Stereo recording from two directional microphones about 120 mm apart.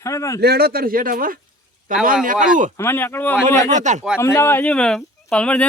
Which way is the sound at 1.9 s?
90° right.